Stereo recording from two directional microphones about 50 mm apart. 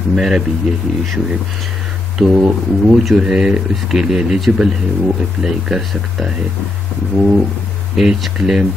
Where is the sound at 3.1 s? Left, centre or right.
Centre.